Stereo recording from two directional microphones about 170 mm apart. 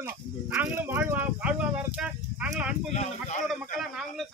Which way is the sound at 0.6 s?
10° right (ahead or behind).